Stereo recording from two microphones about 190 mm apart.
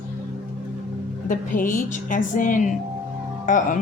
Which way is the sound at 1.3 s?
45° left (ahead or behind).